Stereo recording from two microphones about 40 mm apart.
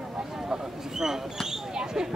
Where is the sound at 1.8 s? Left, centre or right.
Centre.